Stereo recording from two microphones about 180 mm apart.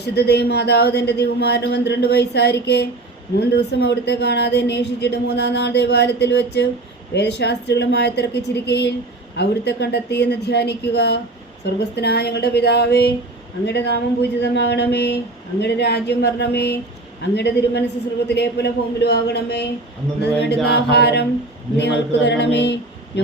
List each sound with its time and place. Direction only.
0.0 s speech: 65° left (ahead or behind)
20.7 s speech: 65° left (ahead or behind)